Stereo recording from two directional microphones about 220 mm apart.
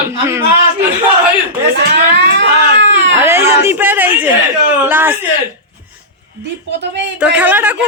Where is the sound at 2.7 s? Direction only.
55° right (ahead or behind).